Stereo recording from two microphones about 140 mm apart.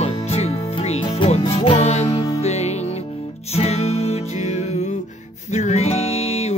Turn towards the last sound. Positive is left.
turn(degrees=50)  # may be behind; listen again after turning